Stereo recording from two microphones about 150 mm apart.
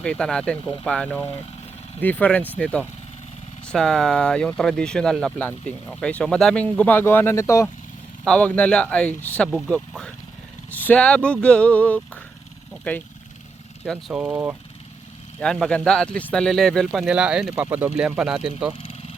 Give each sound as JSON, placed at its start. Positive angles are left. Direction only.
{"t": 0.0, "sound": "speech", "side_deg": 5}
{"t": 8.2, "sound": "speech", "side_deg": 5}
{"t": 14.1, "sound": "speech", "side_deg": -10}
{"t": 15.6, "sound": "speech", "side_deg": 5}
{"t": 18.7, "sound": "a sound", "side_deg": 35}